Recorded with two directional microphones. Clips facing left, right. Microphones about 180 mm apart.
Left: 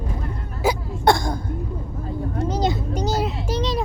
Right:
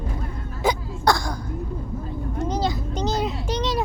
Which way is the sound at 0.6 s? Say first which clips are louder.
Left 1 dB; 5° left (ahead or behind).